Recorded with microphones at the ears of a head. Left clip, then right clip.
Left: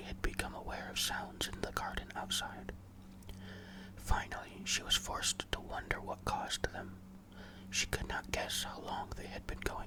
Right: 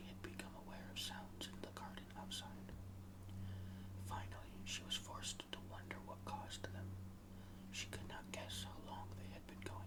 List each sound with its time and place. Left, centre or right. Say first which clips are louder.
0.0 s whispering: left 13 dB; left
4.1 s speech: left 13 dB; left